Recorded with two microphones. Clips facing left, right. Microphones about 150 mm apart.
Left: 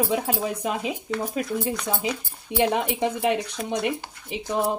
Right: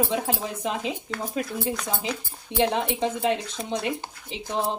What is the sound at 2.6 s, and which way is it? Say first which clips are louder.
Speech: left 1 dB; 10° left (ahead or behind).